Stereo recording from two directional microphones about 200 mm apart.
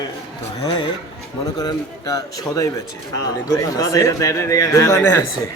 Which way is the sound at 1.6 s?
20° left (ahead or behind).